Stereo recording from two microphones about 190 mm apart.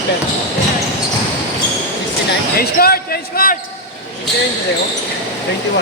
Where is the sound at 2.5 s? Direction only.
50° left (ahead or behind).